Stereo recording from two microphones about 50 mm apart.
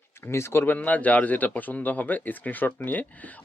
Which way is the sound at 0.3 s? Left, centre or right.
Left.